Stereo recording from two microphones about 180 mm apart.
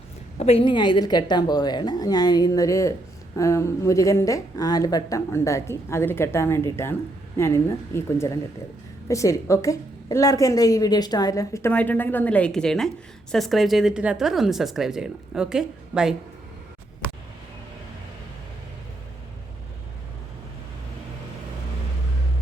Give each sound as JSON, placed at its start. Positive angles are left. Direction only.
{"t": 0.3, "sound": "a woman's voice", "side_deg": 35}